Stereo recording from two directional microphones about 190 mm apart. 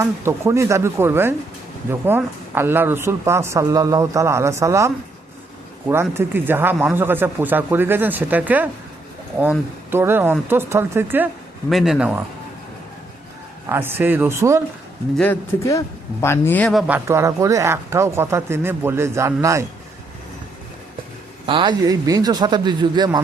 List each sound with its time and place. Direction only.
0.0 s speech: 15° right (ahead or behind)
5.9 s speech: 15° right (ahead or behind)
11.7 s speech: centre (ahead or behind)
13.7 s speech: 10° right (ahead or behind)
15.2 s speech: 15° left (ahead or behind)
16.8 s speech: 10° right (ahead or behind)
21.4 s a man's voice: 25° right (ahead or behind)